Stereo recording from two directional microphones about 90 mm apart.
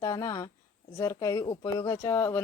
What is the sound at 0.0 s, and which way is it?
A woman's voice, 40° left (ahead or behind).